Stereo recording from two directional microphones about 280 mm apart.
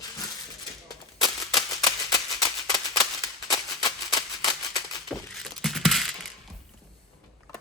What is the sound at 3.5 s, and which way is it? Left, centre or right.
Music, centre.